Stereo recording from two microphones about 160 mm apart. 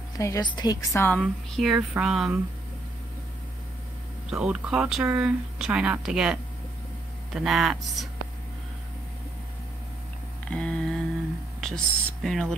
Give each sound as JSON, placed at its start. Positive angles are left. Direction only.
{"t": 0.2, "sound": "a woman's voice", "side_deg": 25}
{"t": 1.2, "sound": "speech", "side_deg": 0}
{"t": 4.3, "sound": "speech", "side_deg": -5}
{"t": 10.5, "sound": "a sound", "side_deg": 5}
{"t": 11.6, "sound": "speech", "side_deg": 0}